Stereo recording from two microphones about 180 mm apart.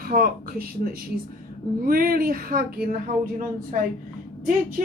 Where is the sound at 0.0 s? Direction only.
55° right (ahead or behind).